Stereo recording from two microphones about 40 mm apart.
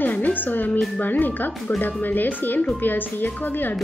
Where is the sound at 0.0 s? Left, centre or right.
Left.